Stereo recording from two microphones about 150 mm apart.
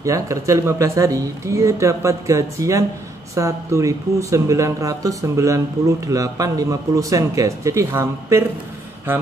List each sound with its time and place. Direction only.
0.0 s speech: 20° right (ahead or behind)